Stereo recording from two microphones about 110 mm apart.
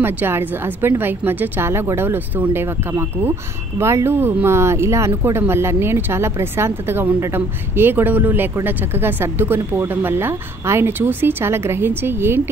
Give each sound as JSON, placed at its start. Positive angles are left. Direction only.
{"t": 0.0, "sound": "a woman's voice", "side_deg": -20}